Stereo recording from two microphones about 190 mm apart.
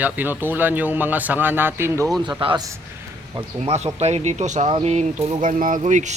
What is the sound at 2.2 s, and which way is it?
Speech, 25° right (ahead or behind).